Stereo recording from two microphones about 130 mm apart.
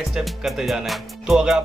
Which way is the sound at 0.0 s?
5° right (ahead or behind).